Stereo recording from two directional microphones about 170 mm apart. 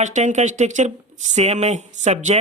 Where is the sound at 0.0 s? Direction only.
45° right (ahead or behind).